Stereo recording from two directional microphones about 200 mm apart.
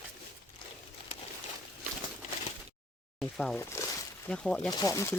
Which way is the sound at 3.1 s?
Centre (ahead or behind).